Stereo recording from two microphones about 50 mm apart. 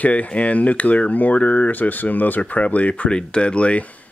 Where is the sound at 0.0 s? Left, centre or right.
Left.